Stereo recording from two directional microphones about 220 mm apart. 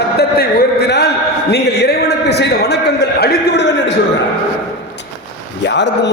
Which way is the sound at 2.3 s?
50° left (ahead or behind).